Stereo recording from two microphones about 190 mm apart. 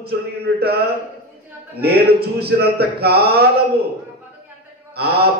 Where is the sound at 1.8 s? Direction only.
55° right (ahead or behind).